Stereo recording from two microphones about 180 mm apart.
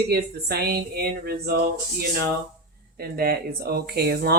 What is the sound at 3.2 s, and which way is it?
A woman's voice, 55° right (ahead or behind).